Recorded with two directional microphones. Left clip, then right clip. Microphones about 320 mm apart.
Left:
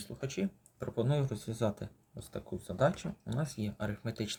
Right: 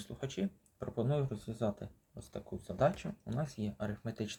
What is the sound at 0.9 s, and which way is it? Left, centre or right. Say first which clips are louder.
Speech: left 2 dB; centre.